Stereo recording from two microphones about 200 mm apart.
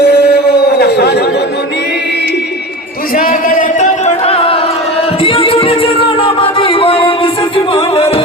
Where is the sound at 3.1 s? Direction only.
45° left (ahead or behind); by 4.6 s 30° left (ahead or behind).